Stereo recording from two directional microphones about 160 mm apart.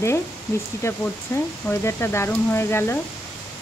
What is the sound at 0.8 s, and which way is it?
Speech, 15° left (ahead or behind).